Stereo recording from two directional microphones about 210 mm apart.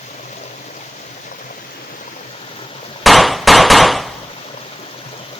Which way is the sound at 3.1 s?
Centre (ahead or behind).